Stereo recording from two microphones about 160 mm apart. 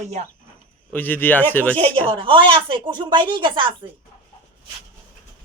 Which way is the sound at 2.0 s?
35° right (ahead or behind).